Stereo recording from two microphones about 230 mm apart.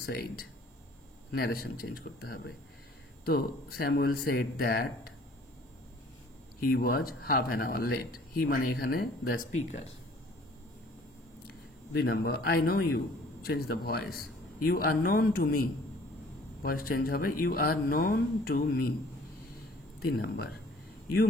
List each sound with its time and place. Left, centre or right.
0.0 s speech: left
6.6 s speech: left
11.4 s a man's voice: left
20.1 s speech: left